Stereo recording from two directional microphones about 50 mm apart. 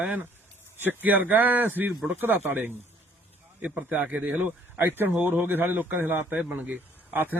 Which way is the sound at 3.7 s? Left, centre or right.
Right.